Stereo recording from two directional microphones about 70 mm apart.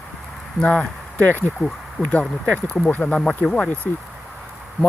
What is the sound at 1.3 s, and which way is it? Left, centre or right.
Speech, left.